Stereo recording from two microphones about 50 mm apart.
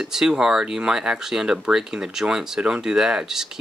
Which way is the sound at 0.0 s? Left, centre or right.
Centre.